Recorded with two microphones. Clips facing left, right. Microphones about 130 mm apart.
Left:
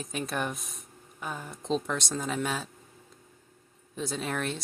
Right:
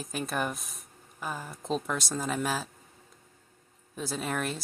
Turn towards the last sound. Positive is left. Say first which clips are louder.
# even
turn(degrees=0)  # may be behind; listen again after turning